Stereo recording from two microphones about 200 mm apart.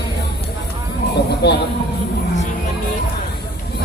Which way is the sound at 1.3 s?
55° left (ahead or behind).